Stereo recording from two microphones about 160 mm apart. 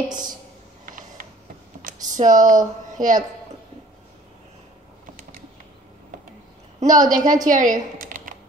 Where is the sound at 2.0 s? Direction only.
25° right (ahead or behind).